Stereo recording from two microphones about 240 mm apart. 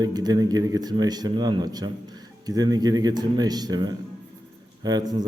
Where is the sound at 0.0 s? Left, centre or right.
Centre.